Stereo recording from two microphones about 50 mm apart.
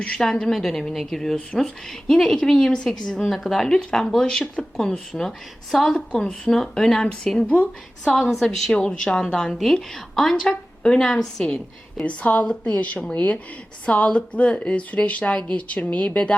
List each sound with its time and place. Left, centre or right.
0.0 s speech: left
0.3 s a woman's voice: centre
7.4 s a woman's voice: left
8.1 s a woman's voice: centre
12.0 s speech: left